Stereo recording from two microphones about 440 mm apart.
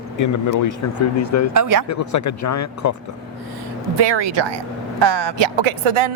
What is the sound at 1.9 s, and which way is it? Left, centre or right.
Speech, left.